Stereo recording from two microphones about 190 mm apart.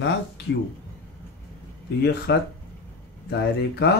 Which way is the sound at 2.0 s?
60° left (ahead or behind).